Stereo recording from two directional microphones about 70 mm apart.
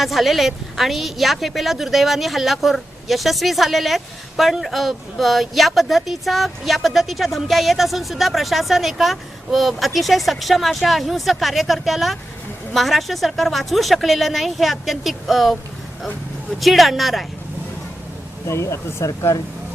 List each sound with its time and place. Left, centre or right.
0.0 s a woman's voice: centre
16.6 s a woman's voice: centre
18.4 s speech: left